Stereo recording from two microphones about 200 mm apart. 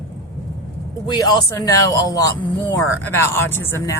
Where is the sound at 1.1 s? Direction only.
20° left (ahead or behind).